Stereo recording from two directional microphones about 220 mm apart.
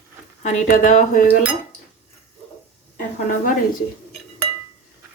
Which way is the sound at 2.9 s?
40° left (ahead or behind).